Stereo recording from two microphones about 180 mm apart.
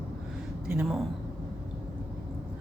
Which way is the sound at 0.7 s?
5° right (ahead or behind).